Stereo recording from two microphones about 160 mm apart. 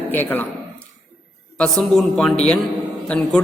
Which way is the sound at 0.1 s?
10° left (ahead or behind).